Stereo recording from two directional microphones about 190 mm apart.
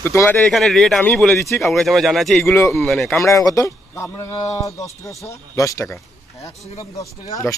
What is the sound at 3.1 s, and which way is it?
A man's voice, 15° left (ahead or behind).